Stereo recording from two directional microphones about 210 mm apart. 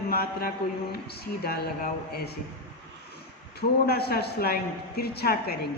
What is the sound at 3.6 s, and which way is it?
Speech, 50° left (ahead or behind).